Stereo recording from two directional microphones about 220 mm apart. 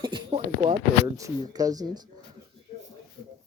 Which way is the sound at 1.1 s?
15° right (ahead or behind).